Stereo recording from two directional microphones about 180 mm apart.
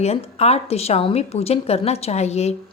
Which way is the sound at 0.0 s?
35° left (ahead or behind).